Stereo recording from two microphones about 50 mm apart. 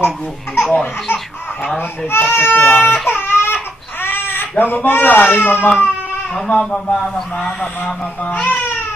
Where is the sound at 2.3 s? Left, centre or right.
Left.